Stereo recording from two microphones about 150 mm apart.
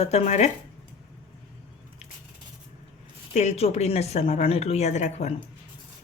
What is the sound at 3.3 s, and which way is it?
Speech, 45° left (ahead or behind).